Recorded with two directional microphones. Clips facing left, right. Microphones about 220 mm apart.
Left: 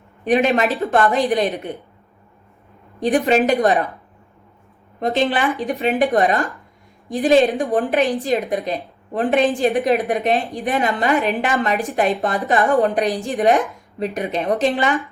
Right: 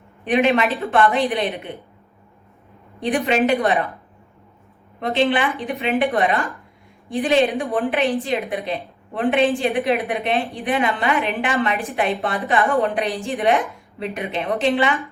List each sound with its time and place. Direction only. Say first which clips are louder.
0.3 s a woman's voice: left 1 dB; 40° left (ahead or behind)
3.0 s a woman's voice: left 3 dB; 40° left (ahead or behind)
4.9 s a woman's voice: even; 40° left (ahead or behind)